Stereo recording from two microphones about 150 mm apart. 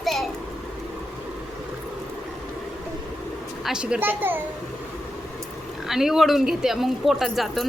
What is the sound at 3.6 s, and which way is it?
Speech, 5° right (ahead or behind).